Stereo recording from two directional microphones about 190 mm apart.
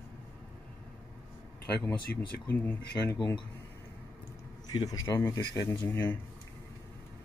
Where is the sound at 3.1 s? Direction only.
15° left (ahead or behind).